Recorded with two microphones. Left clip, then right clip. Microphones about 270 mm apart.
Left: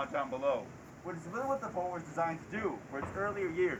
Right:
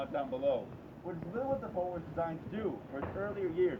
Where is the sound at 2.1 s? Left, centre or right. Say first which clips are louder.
Left 4 dB; centre.